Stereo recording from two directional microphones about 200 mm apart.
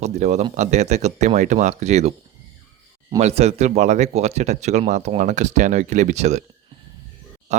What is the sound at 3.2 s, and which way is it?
Speech, 30° right (ahead or behind).